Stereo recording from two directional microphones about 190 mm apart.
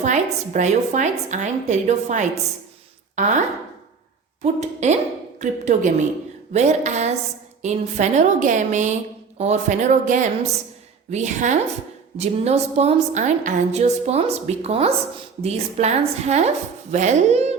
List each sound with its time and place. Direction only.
0.0 s a woman's voice: 40° right (ahead or behind)
4.4 s a woman's voice: 35° right (ahead or behind)